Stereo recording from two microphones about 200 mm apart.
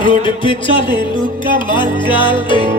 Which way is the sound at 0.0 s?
25° left (ahead or behind).